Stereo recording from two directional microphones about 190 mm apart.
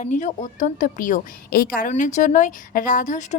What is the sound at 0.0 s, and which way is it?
A woman's voice, 40° left (ahead or behind).